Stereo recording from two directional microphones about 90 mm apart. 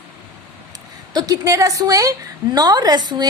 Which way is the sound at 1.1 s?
40° right (ahead or behind).